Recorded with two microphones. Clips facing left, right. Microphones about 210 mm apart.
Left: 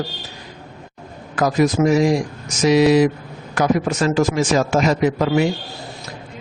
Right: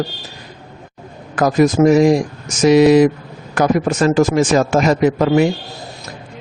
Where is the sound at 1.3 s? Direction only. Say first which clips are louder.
Right 4 dB; 50° right (ahead or behind).